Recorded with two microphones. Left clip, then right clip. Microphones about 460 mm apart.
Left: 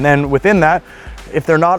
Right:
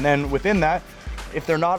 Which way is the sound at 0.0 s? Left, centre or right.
Left.